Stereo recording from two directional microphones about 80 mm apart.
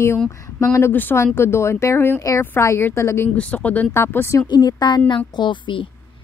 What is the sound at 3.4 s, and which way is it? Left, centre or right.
Speech, centre.